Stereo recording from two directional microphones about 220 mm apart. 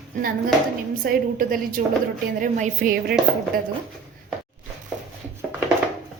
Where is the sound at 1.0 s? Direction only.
40° right (ahead or behind).